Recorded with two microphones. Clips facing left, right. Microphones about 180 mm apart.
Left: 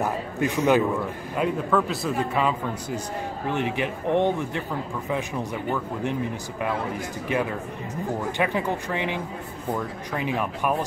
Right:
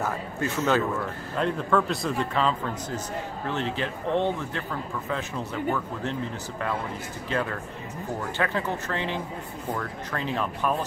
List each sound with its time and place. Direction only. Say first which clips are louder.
0.0 s speech: left 4 dB; 15° left (ahead or behind)
8.4 s speech: left 2 dB; 15° left (ahead or behind)